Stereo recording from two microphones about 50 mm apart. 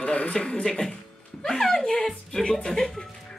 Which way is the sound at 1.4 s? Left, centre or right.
Centre.